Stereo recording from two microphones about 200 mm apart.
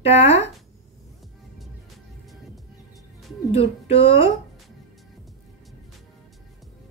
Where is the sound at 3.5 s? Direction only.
30° left (ahead or behind).